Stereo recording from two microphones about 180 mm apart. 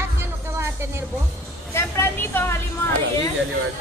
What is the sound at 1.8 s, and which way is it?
Speech, 10° left (ahead or behind).